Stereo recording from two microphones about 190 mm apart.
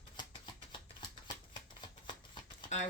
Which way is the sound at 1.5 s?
25° left (ahead or behind).